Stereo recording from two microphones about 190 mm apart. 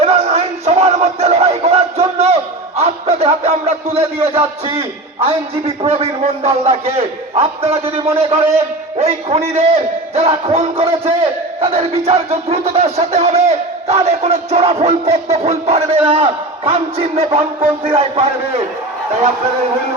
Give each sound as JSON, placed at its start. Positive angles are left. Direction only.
{"t": 0.0, "sound": "music", "side_deg": -35}
{"t": 4.3, "sound": "a man's voice", "side_deg": -30}